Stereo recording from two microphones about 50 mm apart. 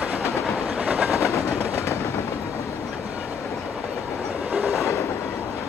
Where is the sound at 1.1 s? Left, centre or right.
Left.